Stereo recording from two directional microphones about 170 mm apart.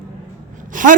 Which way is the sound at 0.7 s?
50° right (ahead or behind).